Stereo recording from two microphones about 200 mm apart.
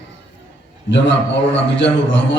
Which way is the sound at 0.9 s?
65° left (ahead or behind).